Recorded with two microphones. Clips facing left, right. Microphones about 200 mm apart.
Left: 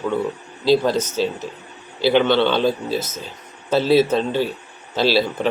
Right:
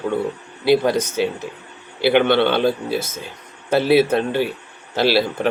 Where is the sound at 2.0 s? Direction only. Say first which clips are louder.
Right 1 dB; 55° right (ahead or behind).